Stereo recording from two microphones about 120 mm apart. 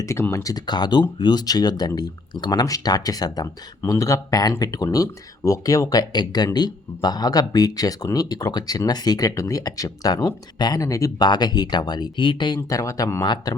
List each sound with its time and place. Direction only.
0.0 s speech: 25° left (ahead or behind); by 12.5 s 40° left (ahead or behind)
12.6 s speech: 25° left (ahead or behind)